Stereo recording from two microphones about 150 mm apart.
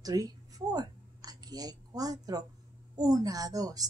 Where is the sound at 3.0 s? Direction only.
25° right (ahead or behind).